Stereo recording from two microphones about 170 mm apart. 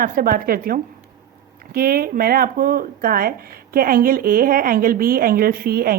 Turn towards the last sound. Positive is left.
turn(degrees=-60)  # may be behind; listen again after turning